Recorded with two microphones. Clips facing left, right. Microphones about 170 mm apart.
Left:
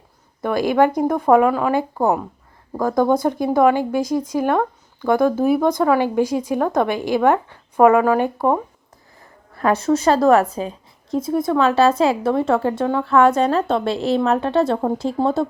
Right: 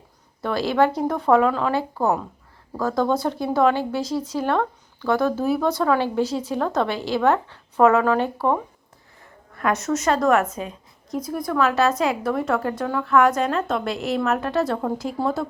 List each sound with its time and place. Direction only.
1.0 s speech: 10° left (ahead or behind)
9.6 s a woman's voice: 30° left (ahead or behind)